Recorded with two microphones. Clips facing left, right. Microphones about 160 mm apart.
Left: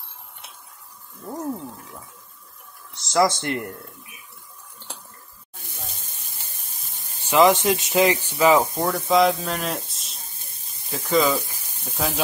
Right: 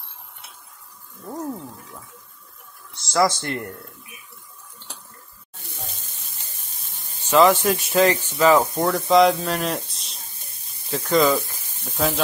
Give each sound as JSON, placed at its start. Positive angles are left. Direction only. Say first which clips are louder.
{"t": 3.1, "sound": "speech", "louder": "even", "side_deg": 20}
{"t": 7.2, "sound": "speech", "louder": "right 1 dB", "side_deg": 15}
{"t": 8.9, "sound": "speech", "louder": "right 3 dB", "side_deg": 0}